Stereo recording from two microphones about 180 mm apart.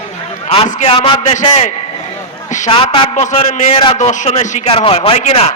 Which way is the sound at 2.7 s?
30° left (ahead or behind).